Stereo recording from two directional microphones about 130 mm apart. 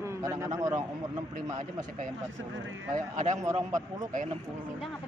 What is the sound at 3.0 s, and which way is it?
Speech, 75° right (ahead or behind).